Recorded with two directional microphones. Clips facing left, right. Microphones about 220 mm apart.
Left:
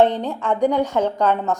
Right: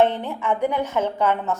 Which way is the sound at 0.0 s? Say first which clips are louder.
Left 2 dB; 15° left (ahead or behind).